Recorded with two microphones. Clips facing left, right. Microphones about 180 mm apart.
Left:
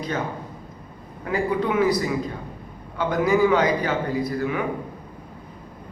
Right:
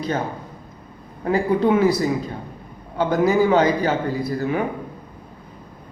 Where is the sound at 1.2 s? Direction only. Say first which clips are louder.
Right 5 dB; 30° right (ahead or behind).